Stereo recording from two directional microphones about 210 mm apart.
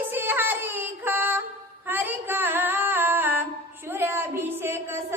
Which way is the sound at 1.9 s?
10° right (ahead or behind).